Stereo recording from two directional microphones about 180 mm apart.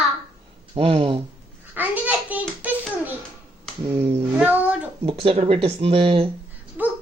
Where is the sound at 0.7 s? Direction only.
30° right (ahead or behind).